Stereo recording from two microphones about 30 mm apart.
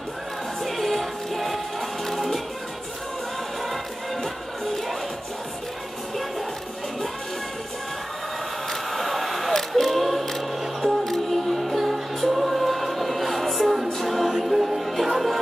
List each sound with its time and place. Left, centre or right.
0.7 s music: centre
8.9 s a sound: centre
9.7 s a capella: centre
14.4 s music: centre